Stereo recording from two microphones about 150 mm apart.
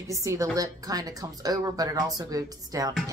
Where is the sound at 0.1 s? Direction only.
20° right (ahead or behind).